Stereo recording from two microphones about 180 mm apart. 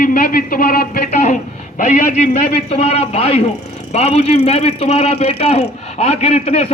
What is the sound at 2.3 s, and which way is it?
A man's voice, 35° left (ahead or behind).